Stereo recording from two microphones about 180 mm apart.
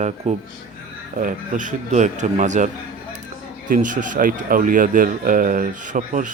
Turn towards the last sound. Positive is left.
turn(degrees=-45)  # may be behind; listen again after turning